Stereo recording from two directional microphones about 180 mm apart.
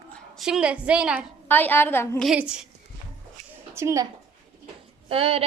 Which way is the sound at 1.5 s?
10° left (ahead or behind).